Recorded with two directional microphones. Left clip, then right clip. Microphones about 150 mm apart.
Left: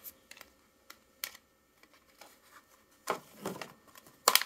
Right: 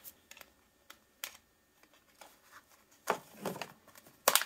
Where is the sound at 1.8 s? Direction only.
10° left (ahead or behind).